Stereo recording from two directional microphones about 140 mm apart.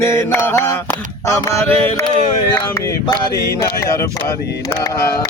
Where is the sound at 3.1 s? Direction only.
20° left (ahead or behind).